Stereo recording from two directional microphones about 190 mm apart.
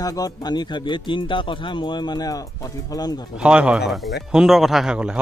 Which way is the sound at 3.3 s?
5° right (ahead or behind).